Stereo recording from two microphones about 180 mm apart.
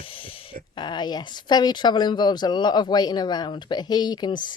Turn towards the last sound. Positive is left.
turn(degrees=25)  # may be behind; listen again after turning